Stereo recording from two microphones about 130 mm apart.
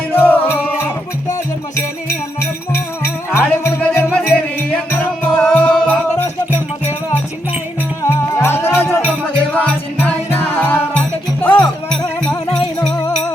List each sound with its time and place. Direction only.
0.1 s music: 15° left (ahead or behind)
2.0 s music: 20° left (ahead or behind)